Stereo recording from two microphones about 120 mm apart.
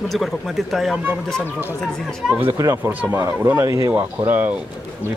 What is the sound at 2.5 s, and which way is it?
Speech, 25° right (ahead or behind).